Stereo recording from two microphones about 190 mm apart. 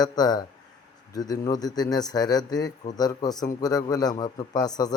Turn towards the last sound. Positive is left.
turn(degrees=20)  # may be behind; listen again after turning